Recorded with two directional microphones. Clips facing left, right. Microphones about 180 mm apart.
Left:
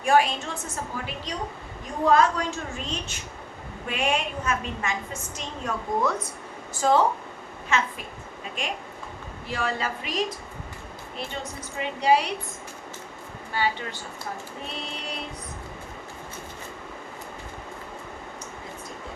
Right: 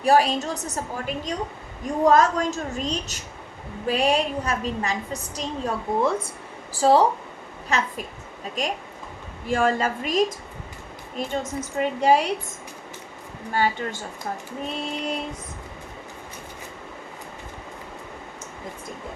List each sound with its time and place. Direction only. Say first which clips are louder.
0.0 s a woman's voice: right 3 dB; 35° right (ahead or behind)
13.5 s a woman's voice: right 4 dB; 45° right (ahead or behind)